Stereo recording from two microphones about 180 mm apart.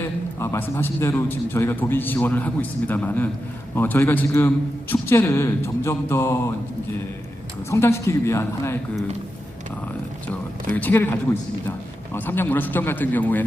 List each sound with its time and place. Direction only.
0.3 s a man's voice: 15° left (ahead or behind)
7.7 s a man's voice: 15° left (ahead or behind)
10.8 s a man's voice: 10° left (ahead or behind)